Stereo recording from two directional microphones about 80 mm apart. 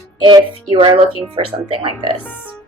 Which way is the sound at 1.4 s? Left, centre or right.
Right.